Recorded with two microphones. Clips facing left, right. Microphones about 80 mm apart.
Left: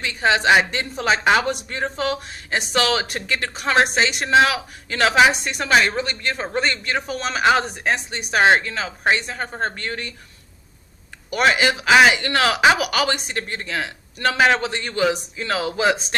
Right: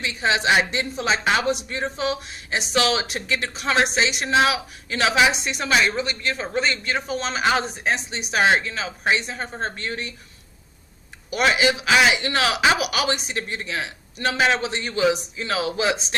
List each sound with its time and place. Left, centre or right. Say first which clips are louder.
0.2 s speech: left 4 dB; left
8.3 s speech: left 3 dB; left
9.2 s speech: left 3 dB; left
11.3 s speech: left 2 dB; left